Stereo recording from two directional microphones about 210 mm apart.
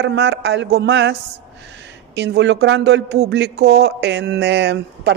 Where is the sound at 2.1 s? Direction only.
55° right (ahead or behind).